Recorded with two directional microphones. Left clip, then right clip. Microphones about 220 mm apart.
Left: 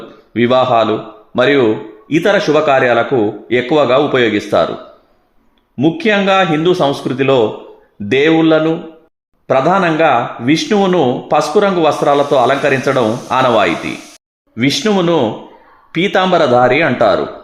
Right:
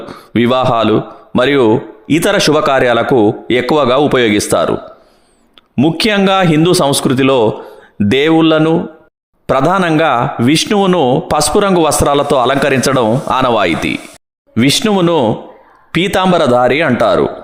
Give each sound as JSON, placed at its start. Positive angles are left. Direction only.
{"t": 0.3, "sound": "speech", "side_deg": -40}
{"t": 5.7, "sound": "speech", "side_deg": -40}